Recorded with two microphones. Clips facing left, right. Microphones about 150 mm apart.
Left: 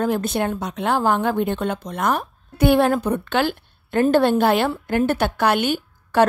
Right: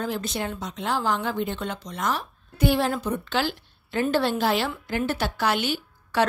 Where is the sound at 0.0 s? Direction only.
55° left (ahead or behind).